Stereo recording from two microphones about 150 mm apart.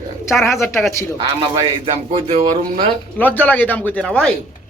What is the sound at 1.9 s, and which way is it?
Speech, 40° right (ahead or behind).